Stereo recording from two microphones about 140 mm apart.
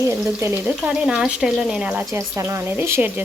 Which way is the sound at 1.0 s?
5° right (ahead or behind).